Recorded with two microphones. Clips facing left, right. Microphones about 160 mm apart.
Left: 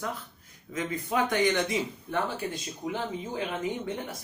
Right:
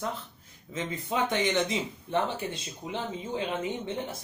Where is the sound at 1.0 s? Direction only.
25° right (ahead or behind).